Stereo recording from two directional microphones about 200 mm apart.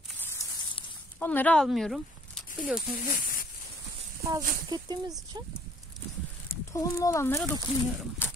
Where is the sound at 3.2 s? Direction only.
45° left (ahead or behind).